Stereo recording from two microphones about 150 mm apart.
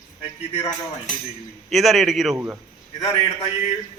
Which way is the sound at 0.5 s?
45° left (ahead or behind).